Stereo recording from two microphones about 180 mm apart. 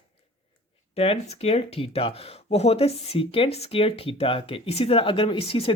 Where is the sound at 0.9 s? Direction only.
35° left (ahead or behind).